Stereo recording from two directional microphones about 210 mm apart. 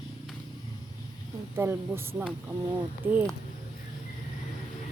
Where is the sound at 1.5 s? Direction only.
10° right (ahead or behind).